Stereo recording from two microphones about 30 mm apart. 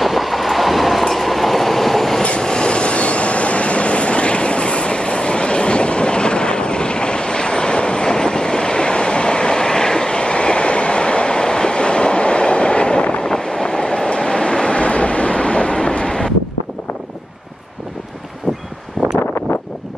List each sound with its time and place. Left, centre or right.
0.0 s train: centre
2.4 s train: left
19.0 s a sound: centre